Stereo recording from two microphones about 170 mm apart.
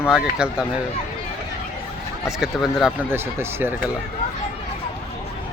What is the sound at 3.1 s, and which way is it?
Speech, 15° right (ahead or behind).